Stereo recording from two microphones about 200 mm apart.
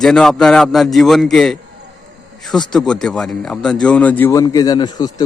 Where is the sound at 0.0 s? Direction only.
5° left (ahead or behind).